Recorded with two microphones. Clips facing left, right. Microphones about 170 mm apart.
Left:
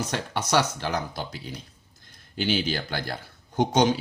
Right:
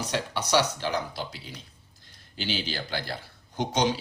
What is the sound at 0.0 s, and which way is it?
Speech, 50° left (ahead or behind).